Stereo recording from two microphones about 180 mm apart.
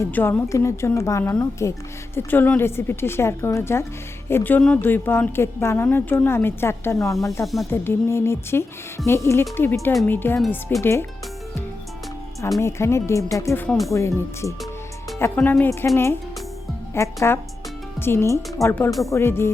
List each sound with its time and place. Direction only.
0.0 s a woman's voice: 10° left (ahead or behind)
7.4 s speech: centre (ahead or behind)
7.7 s a woman's voice: 15° left (ahead or behind)
12.5 s a woman's voice: 15° left (ahead or behind)
16.9 s a woman's voice: 15° left (ahead or behind)
18.9 s speech: centre (ahead or behind)
19.1 s a woman's voice: 15° left (ahead or behind)